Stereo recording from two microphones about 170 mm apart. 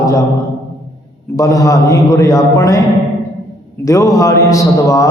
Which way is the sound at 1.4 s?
20° left (ahead or behind).